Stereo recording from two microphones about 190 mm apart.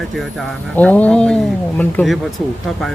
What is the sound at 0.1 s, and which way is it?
Speech, centre (ahead or behind).